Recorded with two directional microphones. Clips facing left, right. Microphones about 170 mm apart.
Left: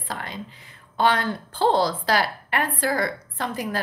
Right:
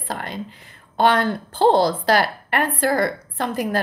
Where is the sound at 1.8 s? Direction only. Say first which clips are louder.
Right 4 dB; 55° right (ahead or behind).